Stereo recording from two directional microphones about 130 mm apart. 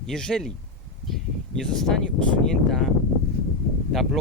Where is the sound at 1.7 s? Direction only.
5° left (ahead or behind).